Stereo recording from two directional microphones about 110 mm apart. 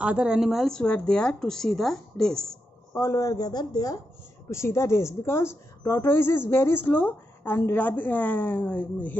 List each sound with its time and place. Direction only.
0.0 s speech: 10° right (ahead or behind); by 2.6 s 5° left (ahead or behind)
2.9 s speech: 25° left (ahead or behind)
4.5 s a woman's voice: 25° left (ahead or behind)